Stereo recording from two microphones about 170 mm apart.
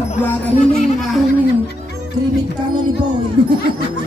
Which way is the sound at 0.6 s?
40° left (ahead or behind).